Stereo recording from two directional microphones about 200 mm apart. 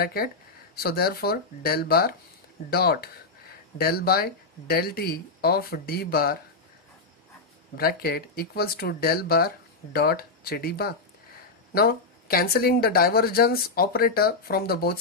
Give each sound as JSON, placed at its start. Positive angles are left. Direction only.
{"t": 0.0, "sound": "speech", "side_deg": 50}
{"t": 7.7, "sound": "speech", "side_deg": 50}